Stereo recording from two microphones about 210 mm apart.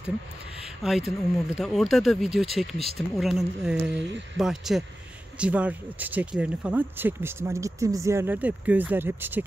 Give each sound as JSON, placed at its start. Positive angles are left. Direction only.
{"t": 0.8, "sound": "speech", "side_deg": 0}